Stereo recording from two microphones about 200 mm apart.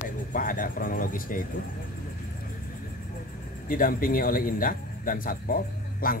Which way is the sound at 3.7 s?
45° left (ahead or behind).